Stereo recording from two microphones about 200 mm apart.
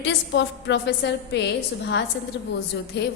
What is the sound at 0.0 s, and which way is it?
A woman's voice, 60° left (ahead or behind).